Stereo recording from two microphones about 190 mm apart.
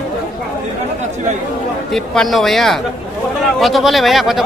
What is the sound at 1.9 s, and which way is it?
Speech, centre (ahead or behind).